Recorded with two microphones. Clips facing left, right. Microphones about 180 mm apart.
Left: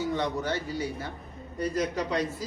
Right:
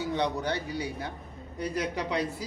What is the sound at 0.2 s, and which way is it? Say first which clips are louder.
A woman's voice: even; 15° right (ahead or behind).